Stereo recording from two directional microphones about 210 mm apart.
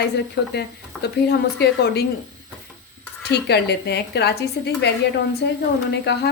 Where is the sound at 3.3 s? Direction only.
50° left (ahead or behind).